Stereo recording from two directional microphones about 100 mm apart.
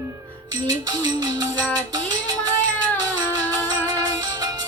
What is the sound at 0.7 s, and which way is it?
Music, 40° right (ahead or behind).